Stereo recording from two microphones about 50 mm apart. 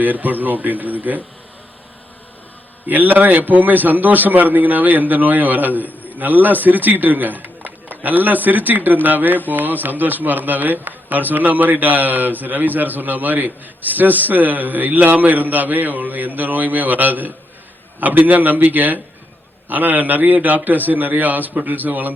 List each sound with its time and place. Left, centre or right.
0.0 s a man's voice: right
2.8 s a man's voice: right